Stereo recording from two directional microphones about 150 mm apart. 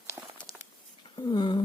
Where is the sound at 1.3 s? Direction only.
30° left (ahead or behind).